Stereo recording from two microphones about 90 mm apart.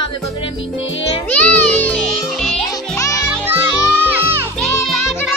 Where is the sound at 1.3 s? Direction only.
20° left (ahead or behind).